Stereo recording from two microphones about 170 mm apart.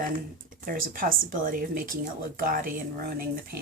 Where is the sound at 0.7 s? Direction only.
60° right (ahead or behind).